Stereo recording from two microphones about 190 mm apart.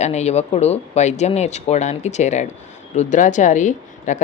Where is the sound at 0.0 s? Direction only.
35° left (ahead or behind).